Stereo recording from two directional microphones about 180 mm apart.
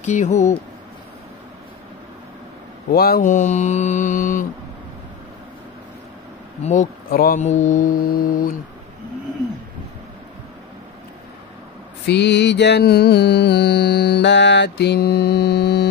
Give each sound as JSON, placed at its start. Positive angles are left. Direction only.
{"t": 0.0, "sound": "speech", "side_deg": 40}
{"t": 2.9, "sound": "speech", "side_deg": 60}
{"t": 6.6, "sound": "speech", "side_deg": 45}
{"t": 12.1, "sound": "music", "side_deg": 70}